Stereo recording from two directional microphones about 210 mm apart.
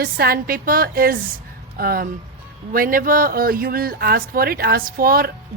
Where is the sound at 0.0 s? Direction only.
45° right (ahead or behind).